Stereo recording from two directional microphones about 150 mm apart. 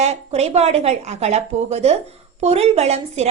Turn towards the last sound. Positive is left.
turn(degrees=-45)  # may be behind; listen again after turning